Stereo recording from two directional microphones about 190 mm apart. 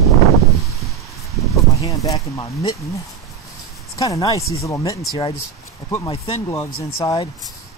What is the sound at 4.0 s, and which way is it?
Speech, 20° left (ahead or behind).